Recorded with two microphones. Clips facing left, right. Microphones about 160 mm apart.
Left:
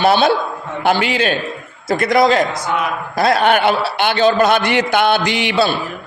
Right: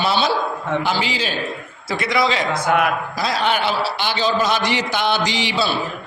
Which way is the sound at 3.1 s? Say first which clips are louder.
Left 7 dB; 55° left (ahead or behind).